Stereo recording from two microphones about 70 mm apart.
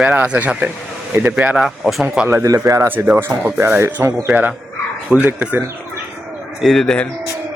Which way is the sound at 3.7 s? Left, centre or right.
Right.